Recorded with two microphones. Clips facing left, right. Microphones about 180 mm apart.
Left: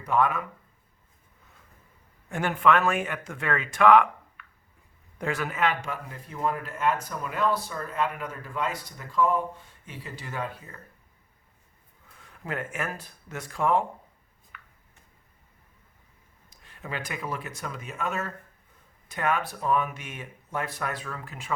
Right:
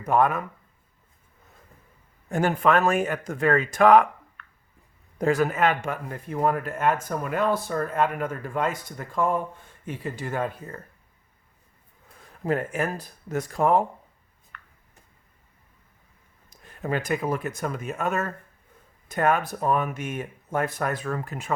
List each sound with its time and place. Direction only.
0.0 s speech: 45° right (ahead or behind)
2.3 s speech: 40° right (ahead or behind)
4.4 s a sound: 5° left (ahead or behind)
5.1 s speech: 40° right (ahead or behind)
12.2 s speech: 40° right (ahead or behind)
14.5 s a sound: 5° left (ahead or behind)
16.6 s speech: 45° right (ahead or behind)